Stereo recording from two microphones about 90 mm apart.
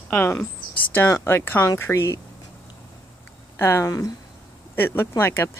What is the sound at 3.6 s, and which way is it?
Speech, 25° left (ahead or behind).